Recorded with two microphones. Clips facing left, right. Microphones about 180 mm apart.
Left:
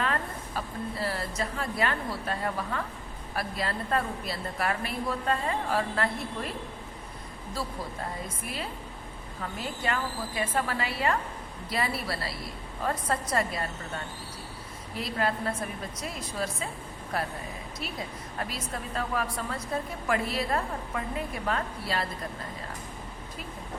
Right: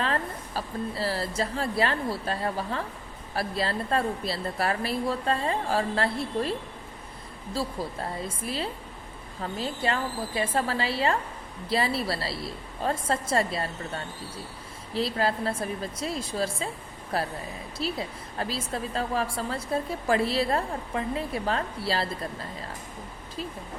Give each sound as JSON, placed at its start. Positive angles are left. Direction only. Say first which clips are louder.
{"t": 0.0, "sound": "a woman's voice", "louder": "right 2 dB", "side_deg": -30}
{"t": 9.4, "sound": "a woman's voice", "louder": "right 4 dB", "side_deg": -30}